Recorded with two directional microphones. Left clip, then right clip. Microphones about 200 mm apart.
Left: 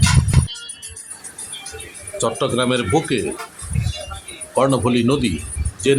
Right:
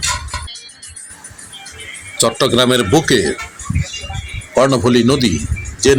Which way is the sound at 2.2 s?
20° right (ahead or behind).